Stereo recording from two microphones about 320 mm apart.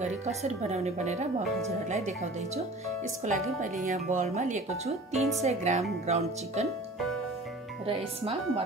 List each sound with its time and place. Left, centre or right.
0.0 s speech: right
7.8 s speech: centre